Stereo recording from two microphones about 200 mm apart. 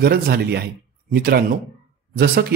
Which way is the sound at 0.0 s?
50° right (ahead or behind).